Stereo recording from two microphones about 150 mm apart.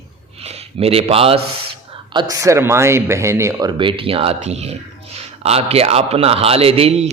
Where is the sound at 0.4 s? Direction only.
40° right (ahead or behind).